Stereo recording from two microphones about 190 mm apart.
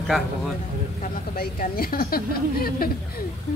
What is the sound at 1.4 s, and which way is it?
A woman's voice, 50° left (ahead or behind).